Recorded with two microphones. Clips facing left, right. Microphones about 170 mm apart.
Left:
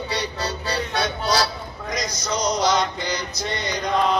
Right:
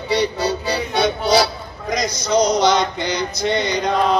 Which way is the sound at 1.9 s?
70° right (ahead or behind).